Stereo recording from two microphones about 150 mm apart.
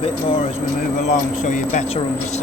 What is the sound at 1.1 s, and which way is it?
Speech, 55° left (ahead or behind).